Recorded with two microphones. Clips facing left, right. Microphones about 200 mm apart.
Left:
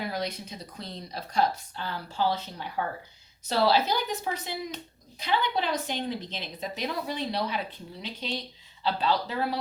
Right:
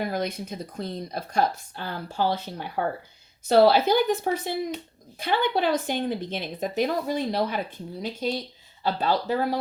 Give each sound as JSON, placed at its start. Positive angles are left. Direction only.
{"t": 0.0, "sound": "speech", "side_deg": -50}